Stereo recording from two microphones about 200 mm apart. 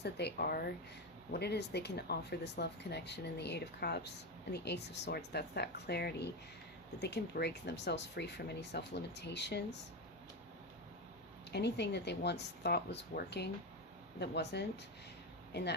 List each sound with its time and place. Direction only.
0.0 s speech: 55° left (ahead or behind)
11.5 s speech: 55° left (ahead or behind)